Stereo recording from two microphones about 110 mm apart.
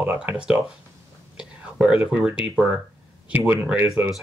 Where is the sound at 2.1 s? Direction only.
10° right (ahead or behind).